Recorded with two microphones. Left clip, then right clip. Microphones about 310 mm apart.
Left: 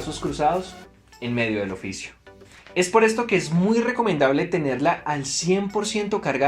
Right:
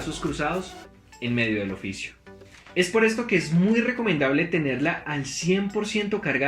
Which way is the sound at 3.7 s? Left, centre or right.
Centre.